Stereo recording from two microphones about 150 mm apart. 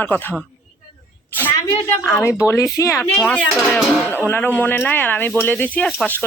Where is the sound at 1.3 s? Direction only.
10° left (ahead or behind).